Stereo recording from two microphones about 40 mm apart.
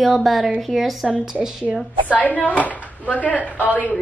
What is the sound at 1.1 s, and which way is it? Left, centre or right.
Speech, right.